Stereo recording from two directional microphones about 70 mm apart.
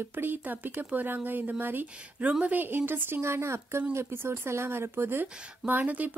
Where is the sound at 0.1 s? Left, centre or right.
Right.